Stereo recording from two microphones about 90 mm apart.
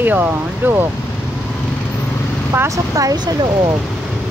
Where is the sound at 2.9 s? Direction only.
45° right (ahead or behind).